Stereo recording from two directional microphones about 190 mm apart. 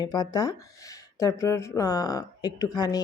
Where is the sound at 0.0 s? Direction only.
20° left (ahead or behind).